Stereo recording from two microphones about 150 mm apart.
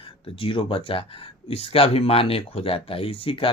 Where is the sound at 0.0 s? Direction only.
35° left (ahead or behind).